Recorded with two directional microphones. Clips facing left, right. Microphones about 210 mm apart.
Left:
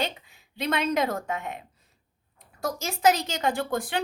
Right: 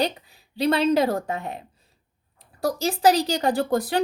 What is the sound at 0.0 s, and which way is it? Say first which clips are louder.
A woman's voice: right 6 dB; 35° right (ahead or behind).